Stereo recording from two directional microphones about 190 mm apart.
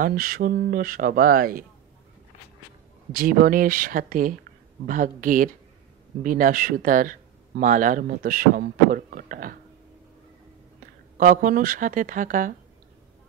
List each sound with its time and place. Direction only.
0.0 s speech: 50° right (ahead or behind)
3.1 s speech: 50° right (ahead or behind)
11.1 s speech: 45° right (ahead or behind)